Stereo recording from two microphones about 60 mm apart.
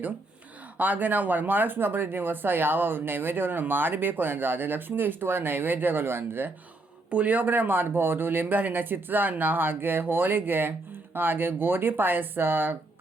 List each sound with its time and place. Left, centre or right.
0.8 s speech: right
7.1 s speech: right